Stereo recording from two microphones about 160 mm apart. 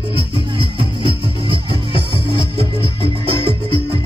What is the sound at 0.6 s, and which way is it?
Music, 35° right (ahead or behind).